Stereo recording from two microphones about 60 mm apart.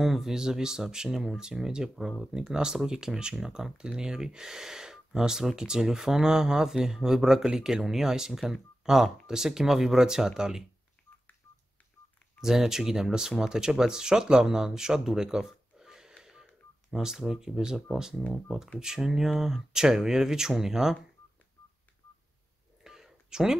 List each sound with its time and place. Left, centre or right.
0.0 s speech: centre
12.4 s speech: centre
22.8 s a sound: centre